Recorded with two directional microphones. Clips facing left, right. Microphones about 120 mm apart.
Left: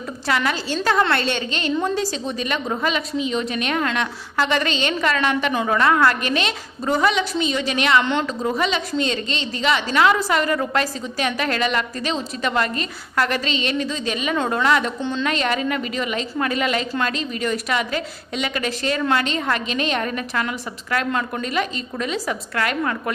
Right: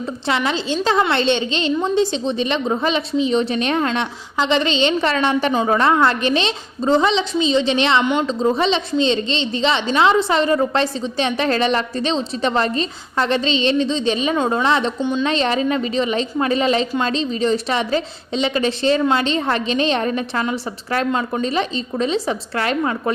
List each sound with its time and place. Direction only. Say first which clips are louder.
0.3 s a woman's voice: right 2 dB; 25° right (ahead or behind)
15.0 s a woman's voice: right 4 dB; 15° right (ahead or behind)
15.3 s a woman's voice: right 2 dB; 30° right (ahead or behind)